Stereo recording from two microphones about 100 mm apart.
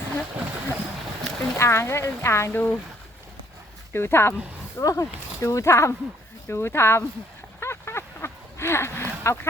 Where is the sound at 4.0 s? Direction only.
25° left (ahead or behind).